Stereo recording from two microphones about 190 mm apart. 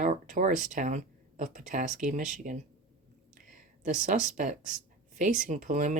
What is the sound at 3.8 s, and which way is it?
Speech, 40° right (ahead or behind).